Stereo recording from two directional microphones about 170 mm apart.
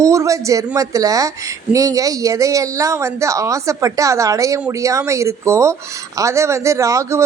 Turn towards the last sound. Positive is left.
turn(degrees=-20)  # may be behind; listen again after turning